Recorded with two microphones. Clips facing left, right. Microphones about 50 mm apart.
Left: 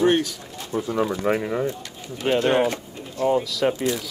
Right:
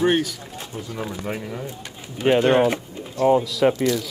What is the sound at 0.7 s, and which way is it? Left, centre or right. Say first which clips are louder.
Speech: left 9 dB; left.